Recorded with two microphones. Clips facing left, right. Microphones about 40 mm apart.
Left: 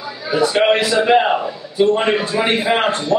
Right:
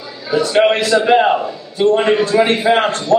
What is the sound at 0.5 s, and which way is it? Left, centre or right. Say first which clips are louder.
A man's voice: right 4 dB; centre.